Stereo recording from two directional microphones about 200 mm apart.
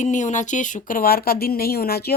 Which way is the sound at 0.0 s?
40° left (ahead or behind).